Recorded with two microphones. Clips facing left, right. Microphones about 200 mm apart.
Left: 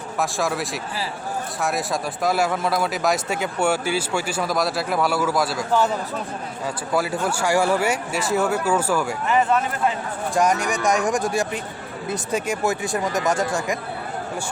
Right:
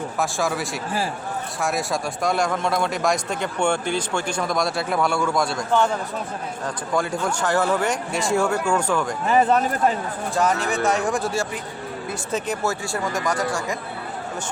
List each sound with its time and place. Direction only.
0.2 s speech: centre (ahead or behind)
9.2 s speech: 35° right (ahead or behind)
10.3 s speech: 15° left (ahead or behind)